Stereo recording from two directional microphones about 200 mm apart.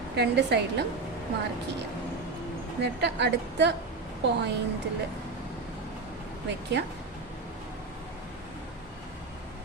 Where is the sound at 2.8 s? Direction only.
60° right (ahead or behind).